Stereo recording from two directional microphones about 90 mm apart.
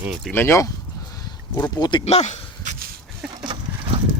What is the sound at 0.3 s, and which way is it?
Speech, 25° left (ahead or behind).